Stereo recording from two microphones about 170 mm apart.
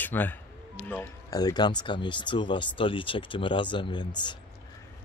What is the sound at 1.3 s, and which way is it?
Speech, 20° left (ahead or behind).